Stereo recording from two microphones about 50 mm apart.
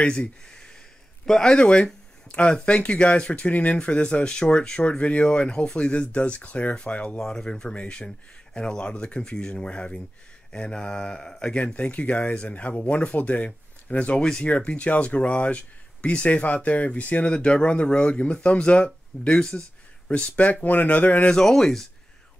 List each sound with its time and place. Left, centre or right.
0.0 s speech: left
1.2 s mantra: centre
2.2 s speech: left
7.2 s mantra: centre
8.5 s speech: centre
10.5 s mantra: centre
11.6 s speech: left
17.3 s speech: left
20.1 s speech: left
21.3 s mantra: centre